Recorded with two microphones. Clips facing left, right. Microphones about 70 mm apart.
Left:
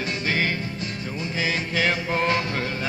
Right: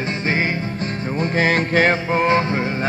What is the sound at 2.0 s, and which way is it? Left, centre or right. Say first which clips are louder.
Music: right 6 dB; right.